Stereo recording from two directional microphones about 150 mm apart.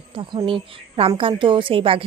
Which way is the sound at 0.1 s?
35° right (ahead or behind).